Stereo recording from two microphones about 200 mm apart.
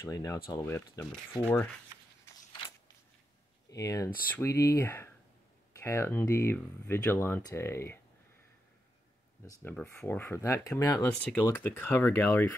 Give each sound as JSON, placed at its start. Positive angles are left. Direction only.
{"t": 0.0, "sound": "speech", "side_deg": 15}
{"t": 3.7, "sound": "speech", "side_deg": 15}
{"t": 9.4, "sound": "speech", "side_deg": 10}